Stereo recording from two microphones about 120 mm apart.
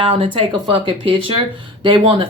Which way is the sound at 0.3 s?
50° right (ahead or behind).